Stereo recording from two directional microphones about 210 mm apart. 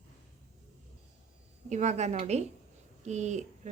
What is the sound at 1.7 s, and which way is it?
A woman's voice, 35° right (ahead or behind).